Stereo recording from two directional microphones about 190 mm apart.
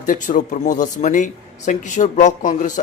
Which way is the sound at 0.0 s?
45° left (ahead or behind).